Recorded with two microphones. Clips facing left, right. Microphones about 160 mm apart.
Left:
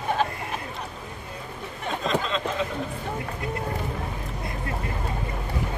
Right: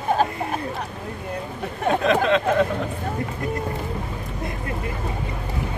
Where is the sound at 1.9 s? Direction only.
60° right (ahead or behind).